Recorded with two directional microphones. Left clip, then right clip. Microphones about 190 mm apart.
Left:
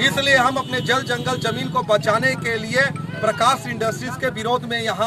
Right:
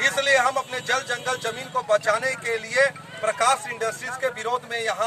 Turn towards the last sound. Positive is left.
turn(degrees=0)  # may be behind; listen again after turning